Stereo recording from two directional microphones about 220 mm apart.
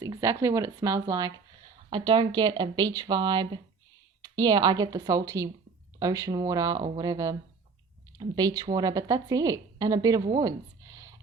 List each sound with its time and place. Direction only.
0.0 s a woman's voice: 15° right (ahead or behind)